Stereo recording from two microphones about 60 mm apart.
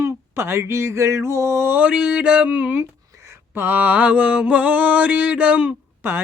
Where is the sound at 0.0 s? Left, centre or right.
Right.